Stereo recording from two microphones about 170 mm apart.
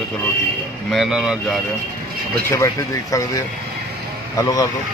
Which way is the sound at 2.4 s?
15° left (ahead or behind).